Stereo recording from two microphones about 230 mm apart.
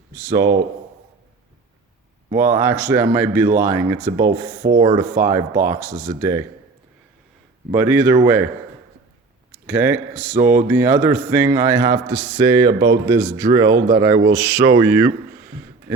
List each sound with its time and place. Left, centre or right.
2.3 s speech: centre
7.7 s speech: centre
9.6 s speech: centre
13.7 s speech: right
13.9 s speech: centre